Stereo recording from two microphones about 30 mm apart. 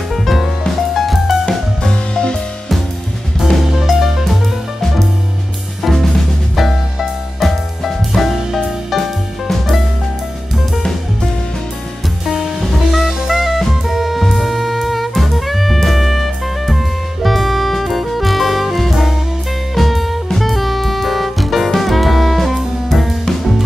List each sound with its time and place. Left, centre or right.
0.1 s music: centre
1.8 s music: left
3.8 s music: centre
5.8 s music: centre
7.3 s music: centre
12.3 s music: centre